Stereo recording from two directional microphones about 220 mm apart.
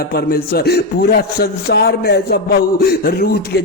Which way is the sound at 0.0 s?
45° left (ahead or behind).